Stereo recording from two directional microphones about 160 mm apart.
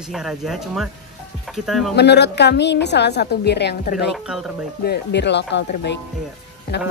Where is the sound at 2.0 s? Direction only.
90° left.